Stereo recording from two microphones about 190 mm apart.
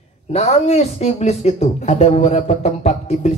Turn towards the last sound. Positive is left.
turn(degrees=35)  # may be behind; listen again after turning